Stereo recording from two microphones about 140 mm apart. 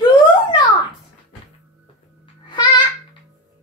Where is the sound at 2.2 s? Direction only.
30° left (ahead or behind).